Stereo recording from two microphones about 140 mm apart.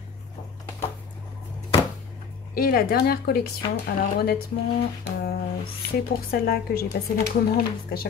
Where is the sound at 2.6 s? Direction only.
90° left.